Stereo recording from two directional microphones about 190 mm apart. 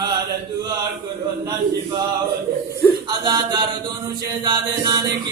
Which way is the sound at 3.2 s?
25° right (ahead or behind).